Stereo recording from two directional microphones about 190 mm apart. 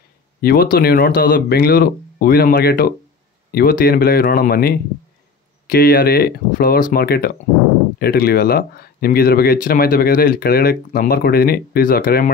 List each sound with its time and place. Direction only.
0.4 s speech: 55° left (ahead or behind)